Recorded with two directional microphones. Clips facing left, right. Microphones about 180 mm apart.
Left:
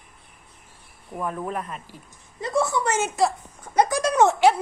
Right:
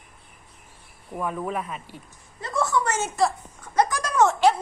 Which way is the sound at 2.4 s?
15° left (ahead or behind).